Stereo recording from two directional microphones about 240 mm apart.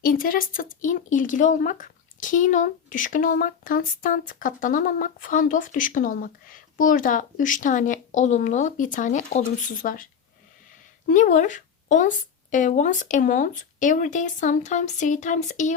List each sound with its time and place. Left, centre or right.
0.0 s speech: left
11.1 s speech: left